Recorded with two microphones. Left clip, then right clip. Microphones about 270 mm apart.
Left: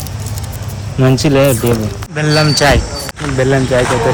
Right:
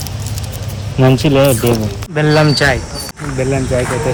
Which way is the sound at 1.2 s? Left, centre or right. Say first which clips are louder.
Left 3 dB; centre.